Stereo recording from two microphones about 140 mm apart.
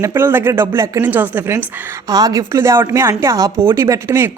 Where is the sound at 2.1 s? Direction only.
25° right (ahead or behind).